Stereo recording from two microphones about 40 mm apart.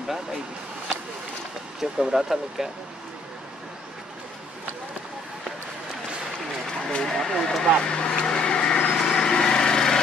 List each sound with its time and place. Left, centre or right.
1.8 s speech: centre
7.1 s vehicle: centre
9.0 s lawn mower: centre